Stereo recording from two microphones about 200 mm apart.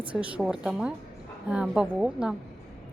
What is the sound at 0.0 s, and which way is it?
A woman's voice, 5° right (ahead or behind).